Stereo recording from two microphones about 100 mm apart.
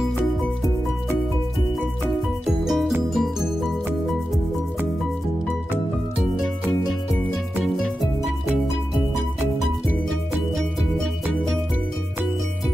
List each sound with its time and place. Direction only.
2.4 s music: centre (ahead or behind)
7.6 s music: centre (ahead or behind)